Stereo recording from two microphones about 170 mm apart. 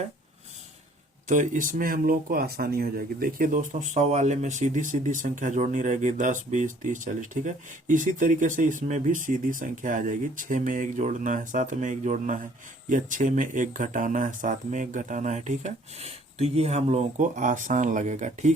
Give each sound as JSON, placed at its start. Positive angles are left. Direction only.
{"t": 1.3, "sound": "speech", "side_deg": -50}